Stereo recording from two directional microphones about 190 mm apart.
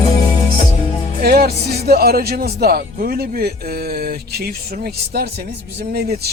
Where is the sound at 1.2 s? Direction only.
55° right (ahead or behind).